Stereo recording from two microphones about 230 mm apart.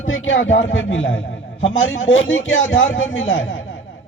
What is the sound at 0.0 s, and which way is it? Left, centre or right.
A man's voice, left.